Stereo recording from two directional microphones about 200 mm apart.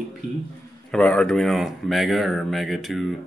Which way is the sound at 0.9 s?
5° left (ahead or behind).